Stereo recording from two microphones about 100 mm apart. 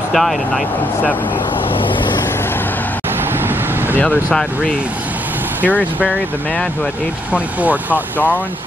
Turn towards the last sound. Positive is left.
turn(degrees=-15)  # may be behind; listen again after turning